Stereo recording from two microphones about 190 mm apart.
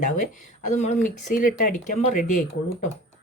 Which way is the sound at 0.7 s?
35° left (ahead or behind).